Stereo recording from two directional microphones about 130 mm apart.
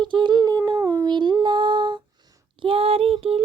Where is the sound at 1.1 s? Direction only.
35° right (ahead or behind).